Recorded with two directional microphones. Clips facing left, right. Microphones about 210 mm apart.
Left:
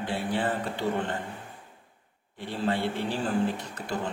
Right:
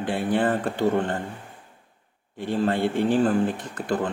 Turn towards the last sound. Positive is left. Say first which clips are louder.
# right 6 dB
turn(degrees=-50)  # may be behind; listen again after turning